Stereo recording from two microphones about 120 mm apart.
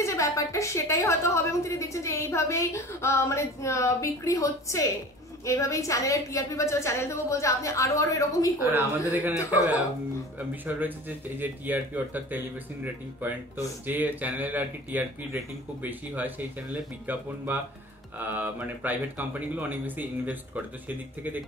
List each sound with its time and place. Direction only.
0.0 s a woman's voice: 25° left (ahead or behind)
8.5 s speech: 15° right (ahead or behind)
10.5 s speech: 15° right (ahead or behind)
13.8 s speech: 15° right (ahead or behind)
17.5 s speech: 20° right (ahead or behind)